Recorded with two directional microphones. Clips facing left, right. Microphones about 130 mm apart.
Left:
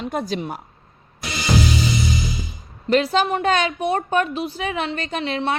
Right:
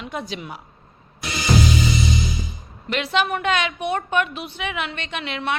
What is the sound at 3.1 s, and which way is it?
A woman's voice, 30° left (ahead or behind).